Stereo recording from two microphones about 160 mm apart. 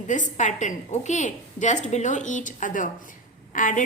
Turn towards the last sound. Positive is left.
turn(degrees=55)  # may be behind; listen again after turning